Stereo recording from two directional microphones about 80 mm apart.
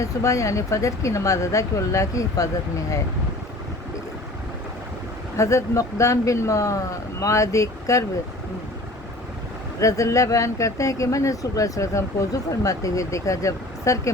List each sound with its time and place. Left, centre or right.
0.0 s speech: left
5.4 s speech: left
9.8 s speech: left